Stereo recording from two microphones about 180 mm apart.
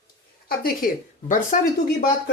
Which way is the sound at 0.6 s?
50° left (ahead or behind).